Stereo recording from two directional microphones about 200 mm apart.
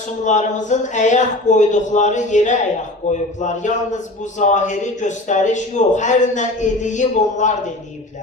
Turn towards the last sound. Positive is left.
turn(degrees=40)  # may be behind; listen again after turning